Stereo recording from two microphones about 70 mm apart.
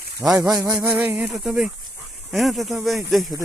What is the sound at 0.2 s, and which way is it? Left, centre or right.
Speech, centre.